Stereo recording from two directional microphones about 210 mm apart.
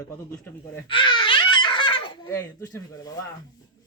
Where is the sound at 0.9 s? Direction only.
25° left (ahead or behind).